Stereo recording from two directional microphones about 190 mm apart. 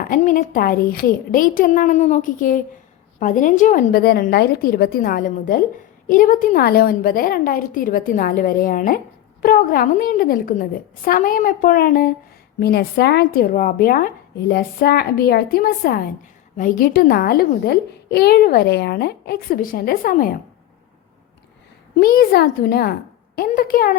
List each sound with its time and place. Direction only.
0.0 s a child's voice: 45° left (ahead or behind)
21.9 s a child's voice: 50° left (ahead or behind)